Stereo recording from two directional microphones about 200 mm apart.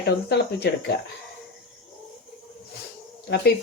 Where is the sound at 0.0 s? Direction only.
55° left (ahead or behind).